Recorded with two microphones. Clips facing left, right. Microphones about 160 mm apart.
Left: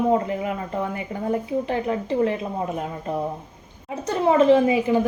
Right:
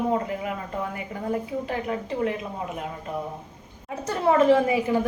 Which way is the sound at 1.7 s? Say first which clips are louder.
Left 4 dB; 30° left (ahead or behind).